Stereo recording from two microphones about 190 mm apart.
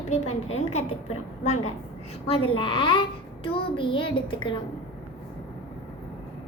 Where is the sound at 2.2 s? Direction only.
30° left (ahead or behind).